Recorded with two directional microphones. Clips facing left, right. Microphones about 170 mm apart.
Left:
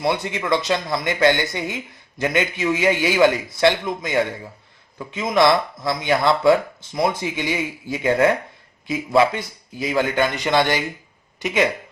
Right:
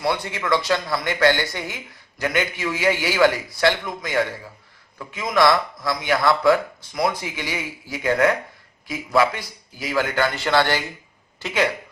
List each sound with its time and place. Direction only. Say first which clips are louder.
0.0 s speech: left 2 dB; 20° left (ahead or behind)